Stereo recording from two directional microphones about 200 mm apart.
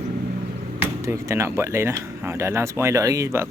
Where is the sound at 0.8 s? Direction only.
15° right (ahead or behind).